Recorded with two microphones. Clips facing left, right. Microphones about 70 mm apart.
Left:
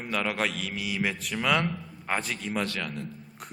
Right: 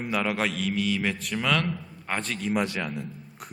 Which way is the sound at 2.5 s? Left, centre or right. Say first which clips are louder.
Right 2 dB; centre.